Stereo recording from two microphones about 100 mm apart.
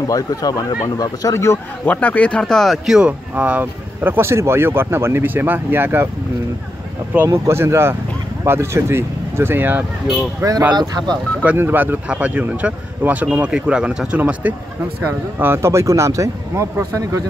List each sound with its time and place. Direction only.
0.1 s speech: 40° left (ahead or behind); by 6.0 s 20° right (ahead or behind)
7.2 s speech: 25° right (ahead or behind)
10.7 s speech: 45° right (ahead or behind)
11.4 s speech: 20° right (ahead or behind)